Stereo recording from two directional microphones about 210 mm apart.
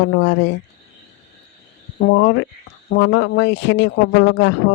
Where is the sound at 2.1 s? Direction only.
60° left (ahead or behind).